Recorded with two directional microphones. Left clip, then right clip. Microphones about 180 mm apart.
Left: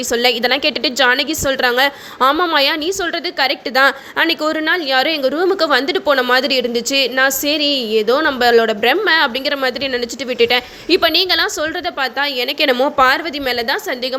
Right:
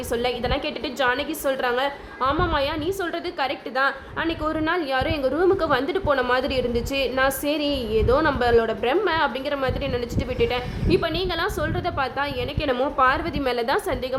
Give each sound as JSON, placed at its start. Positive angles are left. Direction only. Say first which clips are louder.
{"t": 0.1, "sound": "a woman's voice", "louder": "left 10 dB", "side_deg": 20}
{"t": 3.8, "sound": "a woman's voice", "louder": "left 10 dB", "side_deg": 25}
{"t": 4.4, "sound": "a woman's voice", "louder": "left 7 dB", "side_deg": 10}